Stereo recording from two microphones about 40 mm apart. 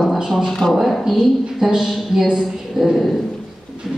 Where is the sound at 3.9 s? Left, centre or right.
Centre.